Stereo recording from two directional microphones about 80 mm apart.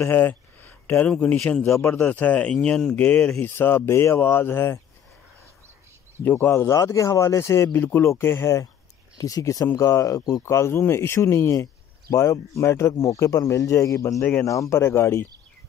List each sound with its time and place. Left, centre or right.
0.0 s a sound: left
1.0 s speech: centre
3.4 s speech: left
6.4 s speech: left
6.8 s speech: left
9.2 s speech: left